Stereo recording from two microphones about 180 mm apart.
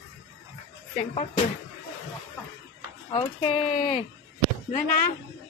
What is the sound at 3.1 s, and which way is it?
Speech, 25° left (ahead or behind).